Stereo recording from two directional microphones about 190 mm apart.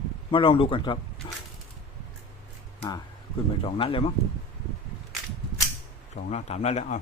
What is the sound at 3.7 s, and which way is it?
Speech, 30° left (ahead or behind).